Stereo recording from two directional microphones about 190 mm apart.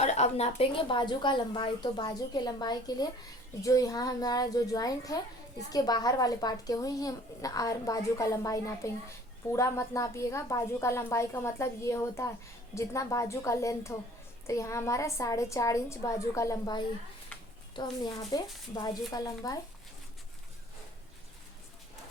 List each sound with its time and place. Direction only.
0.0 s a woman's voice: 35° left (ahead or behind); by 19.5 s 20° left (ahead or behind)